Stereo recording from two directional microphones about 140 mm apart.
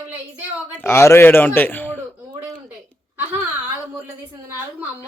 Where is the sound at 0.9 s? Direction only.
20° left (ahead or behind).